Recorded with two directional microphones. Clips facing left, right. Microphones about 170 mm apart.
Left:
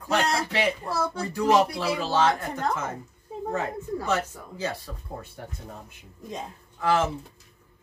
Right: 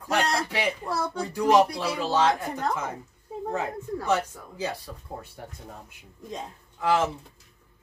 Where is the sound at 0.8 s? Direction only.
5° left (ahead or behind).